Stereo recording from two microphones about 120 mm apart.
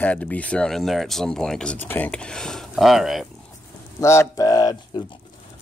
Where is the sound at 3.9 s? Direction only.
25° left (ahead or behind).